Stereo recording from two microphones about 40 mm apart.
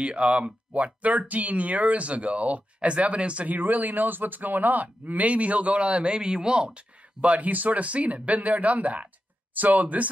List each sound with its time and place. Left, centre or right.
0.0 s speech: right
3.4 s speech: right